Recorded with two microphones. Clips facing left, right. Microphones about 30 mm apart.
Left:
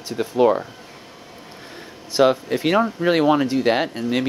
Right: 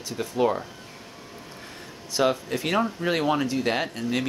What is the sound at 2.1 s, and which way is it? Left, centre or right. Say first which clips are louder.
Speech: left 7 dB; left.